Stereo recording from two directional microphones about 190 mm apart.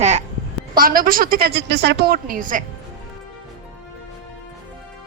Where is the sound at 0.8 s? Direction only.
50° right (ahead or behind).